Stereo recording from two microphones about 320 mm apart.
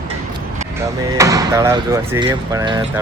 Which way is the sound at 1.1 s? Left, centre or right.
Centre.